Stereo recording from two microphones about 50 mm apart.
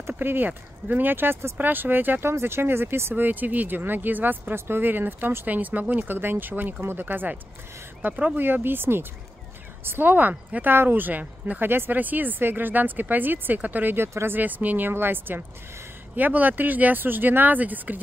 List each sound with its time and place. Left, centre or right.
0.0 s a sound: right
0.5 s speech: right
3.3 s speech: right
4.6 s speech: right
8.1 s speech: right
8.6 s speech: right
11.6 s speech: right
13.9 s speech: right
14.4 s speech: right
14.9 s speech: right